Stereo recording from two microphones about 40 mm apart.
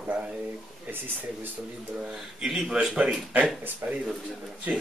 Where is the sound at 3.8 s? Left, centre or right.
Right.